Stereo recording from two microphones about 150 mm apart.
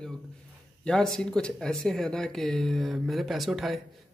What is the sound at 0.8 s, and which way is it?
Speech, 5° left (ahead or behind).